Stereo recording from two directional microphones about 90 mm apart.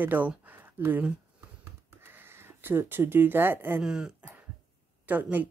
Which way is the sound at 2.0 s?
25° right (ahead or behind).